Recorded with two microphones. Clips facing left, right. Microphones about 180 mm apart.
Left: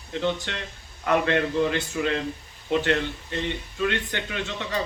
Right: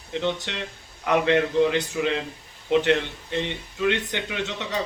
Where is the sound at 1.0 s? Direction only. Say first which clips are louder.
Right 2 dB; 15° right (ahead or behind).